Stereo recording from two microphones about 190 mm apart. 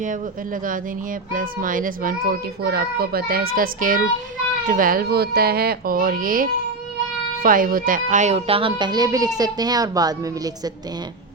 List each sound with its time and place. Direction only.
1.3 s a child's voice: 45° right (ahead or behind); by 10.5 s 20° right (ahead or behind)